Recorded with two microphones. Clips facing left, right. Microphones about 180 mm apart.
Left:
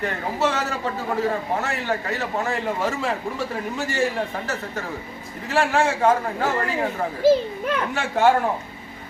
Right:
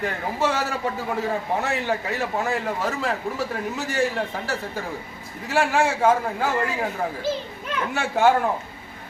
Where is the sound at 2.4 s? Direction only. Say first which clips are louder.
Left 1 dB; centre (ahead or behind).